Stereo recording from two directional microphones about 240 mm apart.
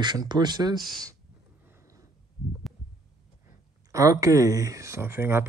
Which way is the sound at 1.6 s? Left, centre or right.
Centre.